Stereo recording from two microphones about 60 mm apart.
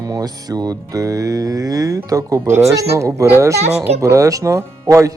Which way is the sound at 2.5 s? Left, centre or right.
Right.